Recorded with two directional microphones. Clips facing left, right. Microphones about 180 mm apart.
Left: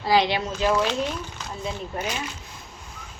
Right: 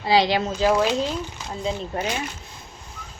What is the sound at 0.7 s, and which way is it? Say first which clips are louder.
Speech: right 2 dB; 15° right (ahead or behind).